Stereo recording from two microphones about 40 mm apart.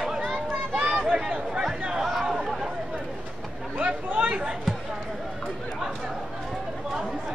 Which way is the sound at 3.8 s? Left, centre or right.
Right.